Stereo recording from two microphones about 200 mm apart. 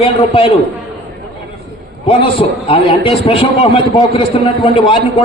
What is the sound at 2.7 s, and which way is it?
A man's voice, 25° left (ahead or behind).